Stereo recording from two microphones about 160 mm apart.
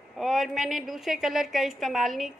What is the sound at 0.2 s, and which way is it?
A woman's voice, centre (ahead or behind).